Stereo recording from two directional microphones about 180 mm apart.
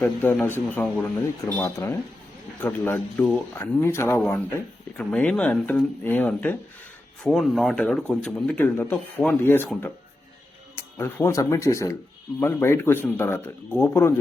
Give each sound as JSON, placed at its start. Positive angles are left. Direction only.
{"t": 0.0, "sound": "a man's voice", "side_deg": 10}
{"t": 10.8, "sound": "a man's voice", "side_deg": 15}